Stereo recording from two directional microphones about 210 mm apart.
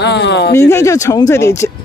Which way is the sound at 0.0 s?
55° left (ahead or behind).